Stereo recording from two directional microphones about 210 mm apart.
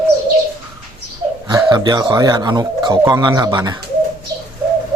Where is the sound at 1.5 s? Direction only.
20° right (ahead or behind).